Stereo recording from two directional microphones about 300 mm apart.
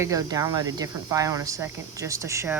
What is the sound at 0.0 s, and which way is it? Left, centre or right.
Speech, centre.